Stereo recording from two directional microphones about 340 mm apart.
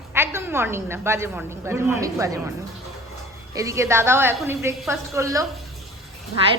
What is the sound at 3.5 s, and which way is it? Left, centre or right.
A woman's voice, centre.